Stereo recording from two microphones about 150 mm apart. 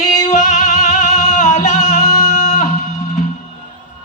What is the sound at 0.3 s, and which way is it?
Music, 55° left (ahead or behind).